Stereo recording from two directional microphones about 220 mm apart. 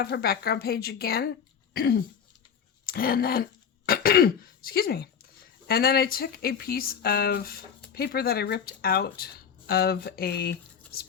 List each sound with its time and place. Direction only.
0.0 s speech: 45° left (ahead or behind)
1.7 s throat clearing: 45° left (ahead or behind)
2.8 s speech: 40° left (ahead or behind)